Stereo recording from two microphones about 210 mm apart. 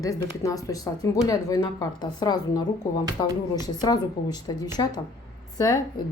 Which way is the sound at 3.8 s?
20° left (ahead or behind).